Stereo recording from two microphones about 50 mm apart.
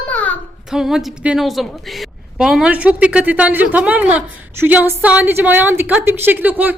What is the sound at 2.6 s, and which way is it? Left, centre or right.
A woman's voice, right.